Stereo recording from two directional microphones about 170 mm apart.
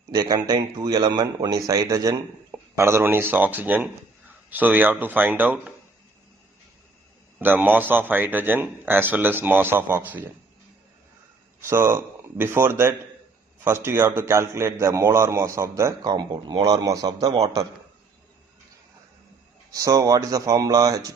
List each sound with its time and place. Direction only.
0.1 s a man's voice: 25° right (ahead or behind)
7.3 s a man's voice: 10° right (ahead or behind)
11.6 s a man's voice: 15° right (ahead or behind)
19.7 s a man's voice: 20° right (ahead or behind)